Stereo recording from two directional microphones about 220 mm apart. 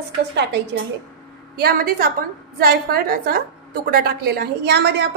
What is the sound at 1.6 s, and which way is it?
A woman's voice, 45° right (ahead or behind).